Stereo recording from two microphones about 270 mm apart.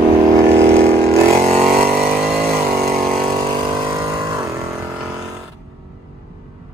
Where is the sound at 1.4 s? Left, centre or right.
Right.